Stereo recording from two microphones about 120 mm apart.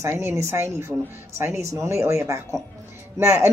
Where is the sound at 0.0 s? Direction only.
20° right (ahead or behind).